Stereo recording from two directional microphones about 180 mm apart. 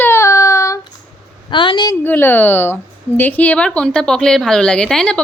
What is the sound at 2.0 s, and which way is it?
Speech, 10° left (ahead or behind).